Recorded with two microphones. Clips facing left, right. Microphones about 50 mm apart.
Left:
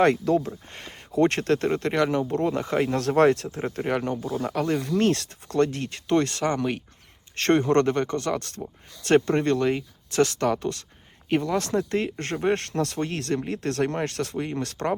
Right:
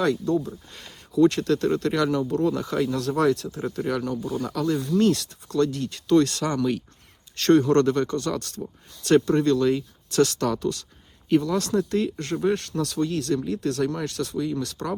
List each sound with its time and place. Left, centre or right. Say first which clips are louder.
0.3 s speech: left 2 dB; left
0.7 s speech: even; left